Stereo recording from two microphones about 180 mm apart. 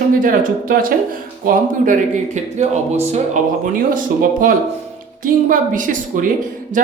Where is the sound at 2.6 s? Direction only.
35° right (ahead or behind).